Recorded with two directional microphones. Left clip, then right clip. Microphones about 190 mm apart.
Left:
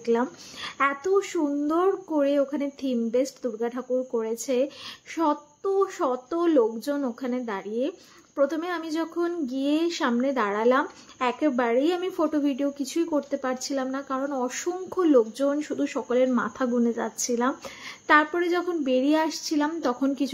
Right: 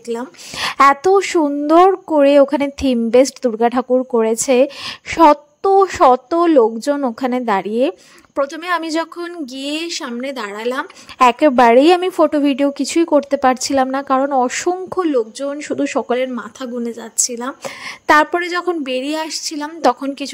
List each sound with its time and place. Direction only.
0.1 s speech: centre (ahead or behind)
0.6 s a woman's voice: 55° right (ahead or behind)
18.0 s a woman's voice: 50° right (ahead or behind)